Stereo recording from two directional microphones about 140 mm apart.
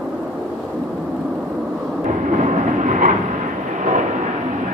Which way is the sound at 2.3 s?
65° right (ahead or behind).